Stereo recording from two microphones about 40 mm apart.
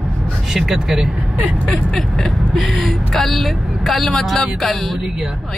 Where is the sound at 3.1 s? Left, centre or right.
Centre.